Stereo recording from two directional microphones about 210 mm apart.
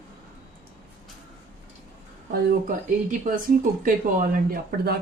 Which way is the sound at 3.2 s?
40° right (ahead or behind).